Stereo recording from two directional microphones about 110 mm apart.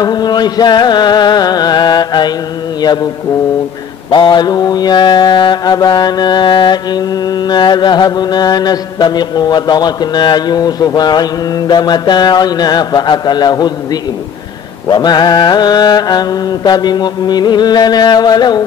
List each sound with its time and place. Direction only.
0.0 s music: 40° left (ahead or behind)
2.8 s mantra: 40° left (ahead or behind)
4.1 s mantra: 40° left (ahead or behind)
14.9 s mantra: 40° left (ahead or behind)